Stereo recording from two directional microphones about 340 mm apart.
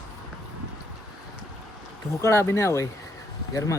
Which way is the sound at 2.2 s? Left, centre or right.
Centre.